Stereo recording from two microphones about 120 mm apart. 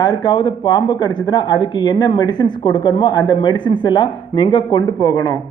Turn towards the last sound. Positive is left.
turn(degrees=30)  # may be behind; listen again after turning